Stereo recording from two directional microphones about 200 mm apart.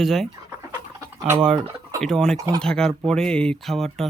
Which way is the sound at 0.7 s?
15° right (ahead or behind).